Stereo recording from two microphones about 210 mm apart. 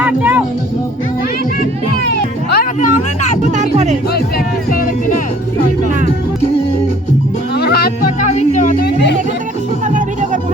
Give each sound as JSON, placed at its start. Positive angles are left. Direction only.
{"t": 0.0, "sound": "speech", "side_deg": -10}
{"t": 2.0, "sound": "music", "side_deg": 50}
{"t": 3.4, "sound": "music", "side_deg": -35}
{"t": 4.7, "sound": "music", "side_deg": 40}
{"t": 7.5, "sound": "a sound", "side_deg": 50}
{"t": 9.8, "sound": "music", "side_deg": -35}